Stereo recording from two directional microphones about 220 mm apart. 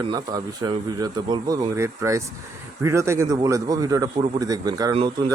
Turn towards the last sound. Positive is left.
turn(degrees=-20)  # may be behind; listen again after turning